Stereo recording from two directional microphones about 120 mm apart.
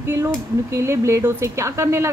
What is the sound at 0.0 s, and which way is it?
Speech, 20° right (ahead or behind).